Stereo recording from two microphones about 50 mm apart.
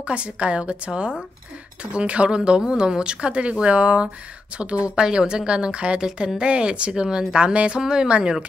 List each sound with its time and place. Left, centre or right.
0.0 s a woman's voice: right